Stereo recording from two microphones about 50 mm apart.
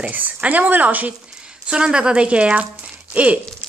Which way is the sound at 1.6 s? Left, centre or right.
Centre.